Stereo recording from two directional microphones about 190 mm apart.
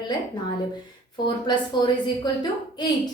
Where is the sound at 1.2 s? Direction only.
25° left (ahead or behind).